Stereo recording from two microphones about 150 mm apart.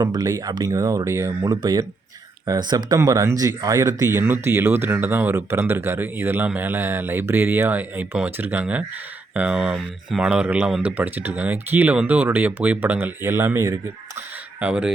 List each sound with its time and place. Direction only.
0.0 s speech: 25° right (ahead or behind)
14.6 s speech: 5° right (ahead or behind)